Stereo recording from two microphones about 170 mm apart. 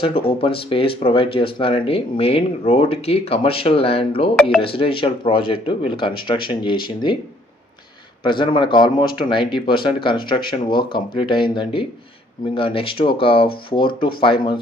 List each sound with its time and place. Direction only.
0.0 s speech: 35° left (ahead or behind)
8.2 s speech: 30° left (ahead or behind)